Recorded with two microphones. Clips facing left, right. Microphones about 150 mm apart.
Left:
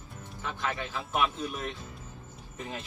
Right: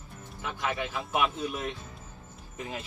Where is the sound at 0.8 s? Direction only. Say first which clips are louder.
Right 1 dB; 10° right (ahead or behind).